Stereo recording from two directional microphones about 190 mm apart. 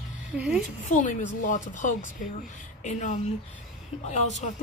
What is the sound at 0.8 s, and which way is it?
A woman's voice, 40° left (ahead or behind).